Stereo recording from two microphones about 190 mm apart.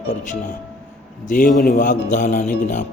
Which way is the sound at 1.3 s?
45° left (ahead or behind).